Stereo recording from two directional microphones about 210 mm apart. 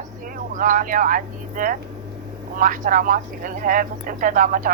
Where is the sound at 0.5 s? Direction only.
40° right (ahead or behind).